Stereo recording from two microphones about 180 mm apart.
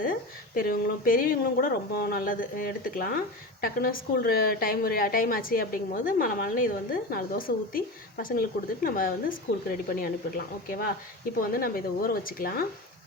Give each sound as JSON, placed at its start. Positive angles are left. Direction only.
{"t": 0.0, "sound": "a woman's voice", "side_deg": 50}